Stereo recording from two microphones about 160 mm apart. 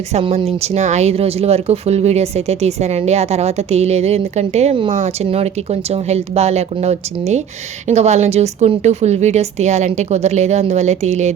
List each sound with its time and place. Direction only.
0.1 s a woman's voice: 40° right (ahead or behind)